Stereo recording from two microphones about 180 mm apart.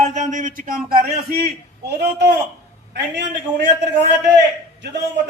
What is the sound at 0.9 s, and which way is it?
A man's voice, 60° right (ahead or behind).